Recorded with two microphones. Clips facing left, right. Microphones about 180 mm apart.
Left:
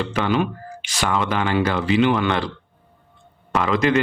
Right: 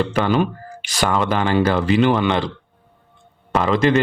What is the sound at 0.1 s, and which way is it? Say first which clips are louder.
Speech: right 2 dB; 40° right (ahead or behind).